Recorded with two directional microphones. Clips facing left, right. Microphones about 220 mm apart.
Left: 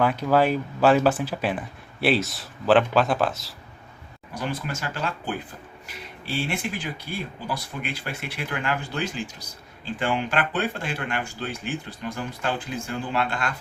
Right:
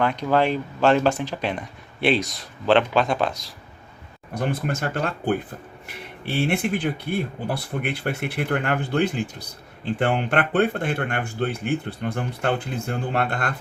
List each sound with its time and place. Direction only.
0.0 s speech: 5° left (ahead or behind)
4.4 s speech: 55° right (ahead or behind)